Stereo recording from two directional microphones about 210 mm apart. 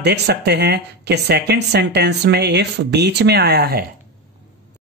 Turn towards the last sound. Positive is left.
turn(degrees=-50)  # may be behind; listen again after turning